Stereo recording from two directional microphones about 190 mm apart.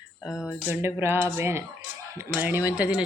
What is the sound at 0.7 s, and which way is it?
Speech, 10° right (ahead or behind).